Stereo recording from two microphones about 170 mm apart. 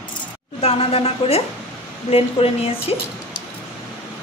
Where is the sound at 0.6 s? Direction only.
35° left (ahead or behind).